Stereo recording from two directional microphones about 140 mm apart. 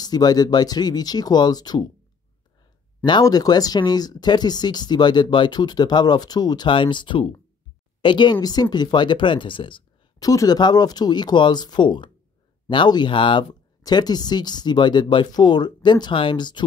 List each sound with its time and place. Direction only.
0.0 s speech: 30° left (ahead or behind)
3.1 s speech: 30° left (ahead or behind)